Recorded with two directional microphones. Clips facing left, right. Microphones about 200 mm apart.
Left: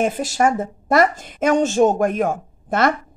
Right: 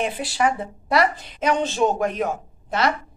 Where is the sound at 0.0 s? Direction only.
45° left (ahead or behind).